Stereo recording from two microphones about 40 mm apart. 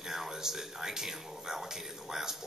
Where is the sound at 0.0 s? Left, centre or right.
Centre.